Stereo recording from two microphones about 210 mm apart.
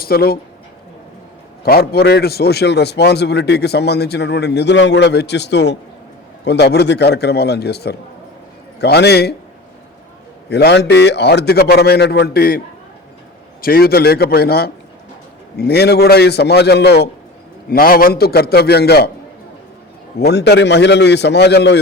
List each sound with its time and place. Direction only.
0.0 s speech: 45° left (ahead or behind)
1.6 s a man's voice: 45° left (ahead or behind)
10.5 s a man's voice: 55° left (ahead or behind)
20.1 s a man's voice: 50° left (ahead or behind)